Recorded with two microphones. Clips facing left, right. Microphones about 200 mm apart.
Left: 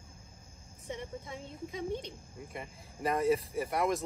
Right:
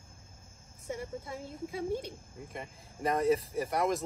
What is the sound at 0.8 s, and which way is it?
Speech, 5° right (ahead or behind).